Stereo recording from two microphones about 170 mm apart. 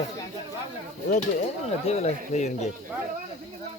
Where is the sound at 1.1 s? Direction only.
45° left (ahead or behind).